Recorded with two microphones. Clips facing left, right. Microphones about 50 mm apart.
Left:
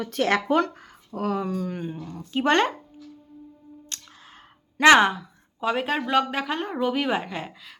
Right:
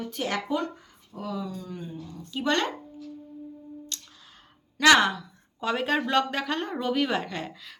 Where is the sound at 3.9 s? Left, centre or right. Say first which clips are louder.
Even; left.